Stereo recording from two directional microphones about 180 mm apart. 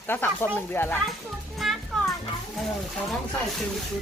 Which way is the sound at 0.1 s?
10° left (ahead or behind).